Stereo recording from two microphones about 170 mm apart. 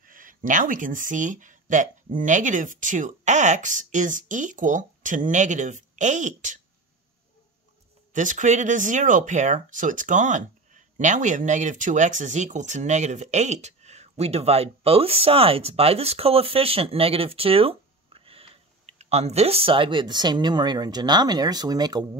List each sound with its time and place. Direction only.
0.0 s speech: 55° right (ahead or behind)
8.1 s speech: 50° right (ahead or behind); by 22.2 s 25° right (ahead or behind)